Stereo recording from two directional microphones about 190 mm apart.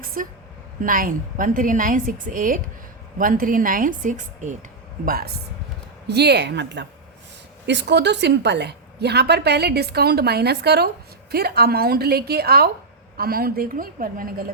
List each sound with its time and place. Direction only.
0.0 s a sound: 50° right (ahead or behind)
0.8 s a woman's voice: 45° right (ahead or behind)
5.0 s a woman's voice: 50° right (ahead or behind)